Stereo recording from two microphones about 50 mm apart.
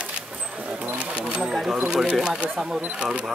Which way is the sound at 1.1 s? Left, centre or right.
Centre.